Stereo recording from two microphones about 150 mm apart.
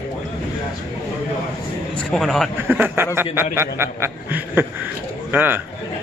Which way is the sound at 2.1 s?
5° left (ahead or behind).